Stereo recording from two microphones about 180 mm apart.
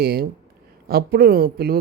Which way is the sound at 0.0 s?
60° right (ahead or behind).